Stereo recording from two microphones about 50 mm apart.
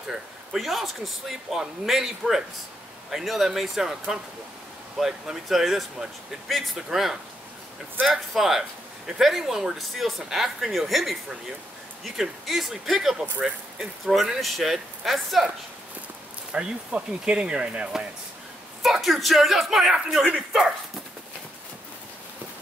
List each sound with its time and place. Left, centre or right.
0.1 s speech: centre
5.0 s speech: centre
16.5 s speech: centre
18.8 s speech: centre
20.2 s speech: centre